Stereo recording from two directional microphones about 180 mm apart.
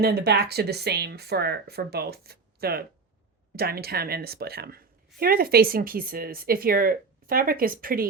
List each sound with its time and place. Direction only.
0.0 s speech: 60° right (ahead or behind)